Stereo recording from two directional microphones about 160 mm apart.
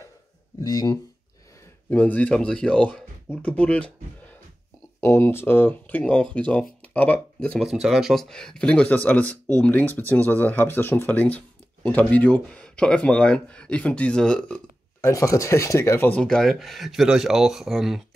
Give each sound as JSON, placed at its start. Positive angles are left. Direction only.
{"t": 0.6, "sound": "speech", "side_deg": 25}
{"t": 1.9, "sound": "speech", "side_deg": 10}
{"t": 15.0, "sound": "speech", "side_deg": 20}